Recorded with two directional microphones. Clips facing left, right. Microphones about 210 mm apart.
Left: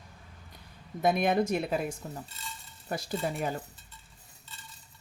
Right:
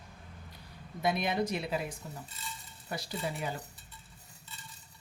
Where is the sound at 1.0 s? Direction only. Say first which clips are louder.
Left 5 dB; 50° left (ahead or behind).